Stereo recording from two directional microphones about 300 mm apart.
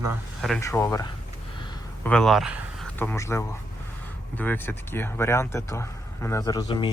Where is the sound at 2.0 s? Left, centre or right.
Centre.